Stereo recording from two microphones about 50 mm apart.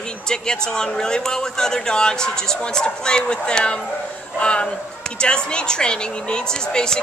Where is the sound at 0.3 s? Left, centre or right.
Centre.